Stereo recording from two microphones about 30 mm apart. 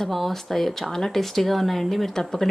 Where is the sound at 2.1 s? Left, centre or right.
Centre.